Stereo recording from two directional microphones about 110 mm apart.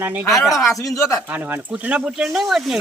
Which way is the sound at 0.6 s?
30° left (ahead or behind).